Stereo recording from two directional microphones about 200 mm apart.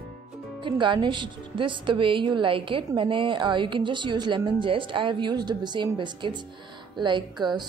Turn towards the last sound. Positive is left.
turn(degrees=-20)  # may be behind; listen again after turning